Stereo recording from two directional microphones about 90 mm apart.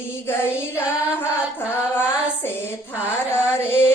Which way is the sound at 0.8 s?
25° left (ahead or behind).